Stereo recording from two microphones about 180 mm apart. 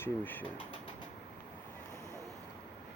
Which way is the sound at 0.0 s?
10° left (ahead or behind).